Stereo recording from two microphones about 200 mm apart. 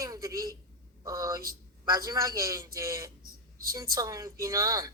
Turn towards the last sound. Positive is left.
turn(degrees=-20)  # may be behind; listen again after turning